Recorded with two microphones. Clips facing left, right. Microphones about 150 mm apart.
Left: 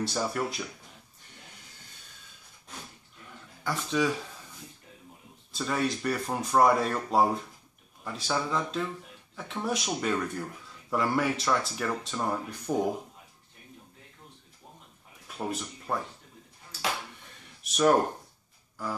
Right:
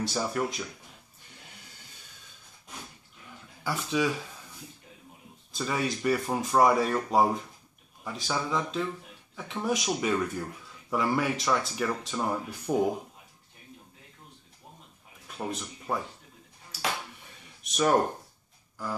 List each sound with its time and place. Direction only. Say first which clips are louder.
0.0 s speech: right 1 dB; centre (ahead or behind)
3.3 s a sound: even; 5° right (ahead or behind)
5.5 s speech: left 1 dB; centre (ahead or behind)
15.2 s speech: left 1 dB; centre (ahead or behind)
17.6 s speech: left 3 dB; centre (ahead or behind)